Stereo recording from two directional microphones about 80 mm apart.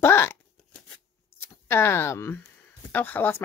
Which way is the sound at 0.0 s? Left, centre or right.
Left.